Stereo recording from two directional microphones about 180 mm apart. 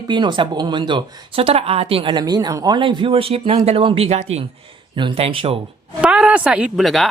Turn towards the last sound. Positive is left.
turn(degrees=0)  # may be behind; listen again after turning